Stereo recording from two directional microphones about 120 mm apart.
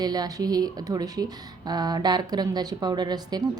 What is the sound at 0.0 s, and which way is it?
Speech, 35° right (ahead or behind).